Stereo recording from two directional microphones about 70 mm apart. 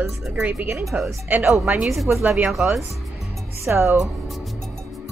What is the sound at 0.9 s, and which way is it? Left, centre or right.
A woman's voice, centre.